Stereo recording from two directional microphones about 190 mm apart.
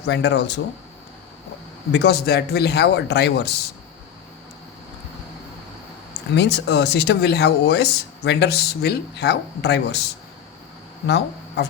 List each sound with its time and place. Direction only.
0.0 s speech: 65° left (ahead or behind)
1.9 s speech: 60° left (ahead or behind)
6.1 s speech: 65° left (ahead or behind)